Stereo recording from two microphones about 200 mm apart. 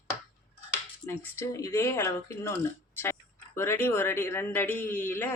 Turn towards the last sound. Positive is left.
turn(degrees=10)  # may be behind; listen again after turning